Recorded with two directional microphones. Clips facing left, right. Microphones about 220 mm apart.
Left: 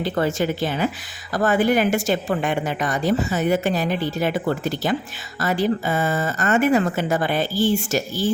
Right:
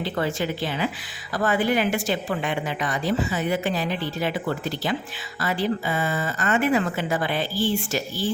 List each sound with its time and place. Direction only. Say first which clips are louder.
0.0 s a woman's voice: left 4 dB; 45° left (ahead or behind)